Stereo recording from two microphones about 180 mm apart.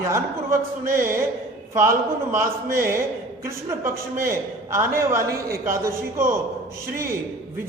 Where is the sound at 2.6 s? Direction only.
50° right (ahead or behind).